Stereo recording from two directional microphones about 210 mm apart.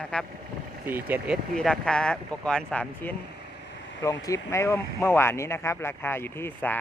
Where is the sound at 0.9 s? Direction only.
10° right (ahead or behind).